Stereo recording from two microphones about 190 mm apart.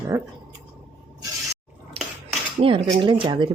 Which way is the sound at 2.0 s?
30° right (ahead or behind).